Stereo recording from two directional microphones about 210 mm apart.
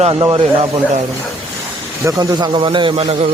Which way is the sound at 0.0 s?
20° right (ahead or behind).